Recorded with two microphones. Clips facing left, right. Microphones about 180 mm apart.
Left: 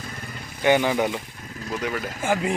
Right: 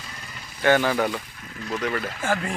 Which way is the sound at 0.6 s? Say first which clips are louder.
Even; 15° left (ahead or behind).